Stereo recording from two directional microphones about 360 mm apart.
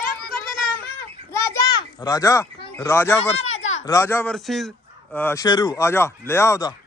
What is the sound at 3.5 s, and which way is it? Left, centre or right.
Children playing, left.